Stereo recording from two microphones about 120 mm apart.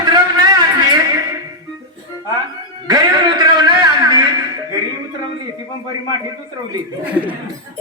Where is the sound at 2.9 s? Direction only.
35° right (ahead or behind).